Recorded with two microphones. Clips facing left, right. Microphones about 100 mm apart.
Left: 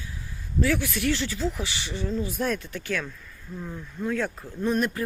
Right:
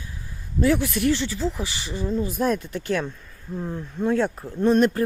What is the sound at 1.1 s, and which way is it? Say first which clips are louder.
Speech: right 2 dB; 30° right (ahead or behind).